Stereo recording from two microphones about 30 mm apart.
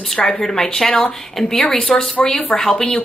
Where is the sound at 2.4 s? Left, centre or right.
Left.